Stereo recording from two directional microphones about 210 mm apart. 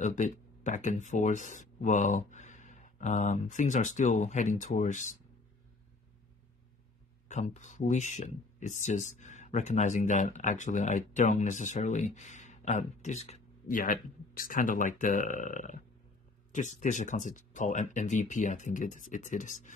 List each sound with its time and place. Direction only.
0.0 s speech: 35° left (ahead or behind)
7.2 s speech: 35° left (ahead or behind)